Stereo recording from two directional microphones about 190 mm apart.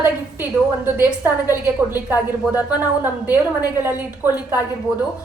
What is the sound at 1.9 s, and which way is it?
A woman's voice, 10° right (ahead or behind).